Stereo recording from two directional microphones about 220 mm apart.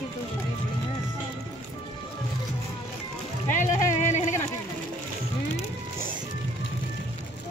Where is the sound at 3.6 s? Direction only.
35° left (ahead or behind).